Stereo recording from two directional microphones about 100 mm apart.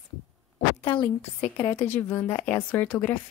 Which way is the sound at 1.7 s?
20° left (ahead or behind).